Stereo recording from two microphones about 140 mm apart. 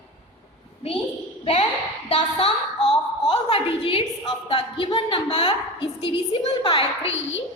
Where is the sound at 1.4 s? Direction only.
45° left (ahead or behind).